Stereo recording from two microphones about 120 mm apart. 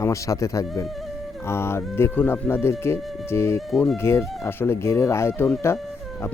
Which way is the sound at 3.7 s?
5° left (ahead or behind).